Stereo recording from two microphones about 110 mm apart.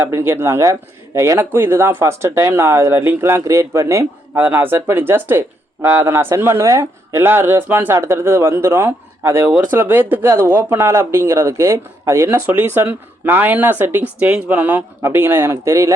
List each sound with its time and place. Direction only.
0.0 s speech: 25° right (ahead or behind)